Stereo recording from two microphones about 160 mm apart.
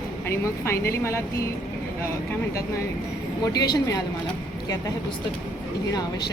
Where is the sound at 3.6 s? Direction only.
25° left (ahead or behind).